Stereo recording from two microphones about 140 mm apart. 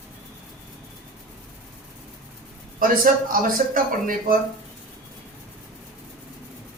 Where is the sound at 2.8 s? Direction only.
80° right.